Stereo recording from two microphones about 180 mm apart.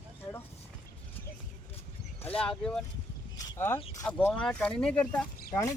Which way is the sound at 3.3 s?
15° left (ahead or behind).